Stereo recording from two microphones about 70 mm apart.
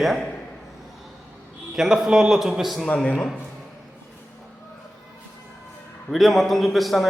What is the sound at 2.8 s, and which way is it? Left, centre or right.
Speech, centre.